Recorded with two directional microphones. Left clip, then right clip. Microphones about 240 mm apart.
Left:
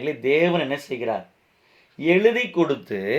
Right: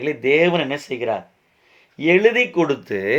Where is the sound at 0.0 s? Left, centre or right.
Right.